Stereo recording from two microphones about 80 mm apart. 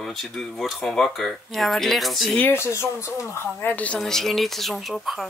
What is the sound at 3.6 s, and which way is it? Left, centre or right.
Speech, centre.